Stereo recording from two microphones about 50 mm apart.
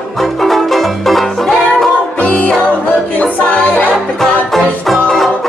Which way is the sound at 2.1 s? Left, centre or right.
Left.